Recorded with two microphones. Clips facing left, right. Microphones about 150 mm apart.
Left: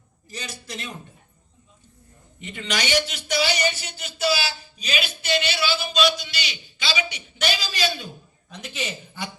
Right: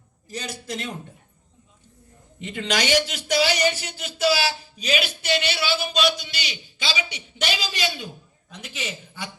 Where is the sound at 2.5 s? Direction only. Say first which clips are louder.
Right 2 dB; 90° right; by 6.5 s 55° right (ahead or behind).